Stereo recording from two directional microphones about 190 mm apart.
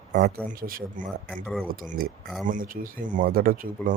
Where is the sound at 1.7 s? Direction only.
50° right (ahead or behind).